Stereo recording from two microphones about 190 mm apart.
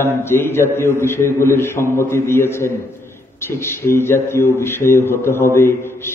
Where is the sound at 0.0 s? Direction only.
10° left (ahead or behind).